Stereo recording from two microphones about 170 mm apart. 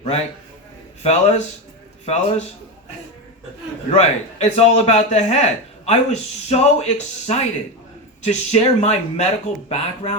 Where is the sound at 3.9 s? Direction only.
40° left (ahead or behind).